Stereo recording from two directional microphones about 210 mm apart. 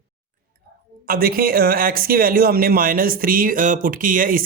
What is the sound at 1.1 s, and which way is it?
Speech, 45° right (ahead or behind).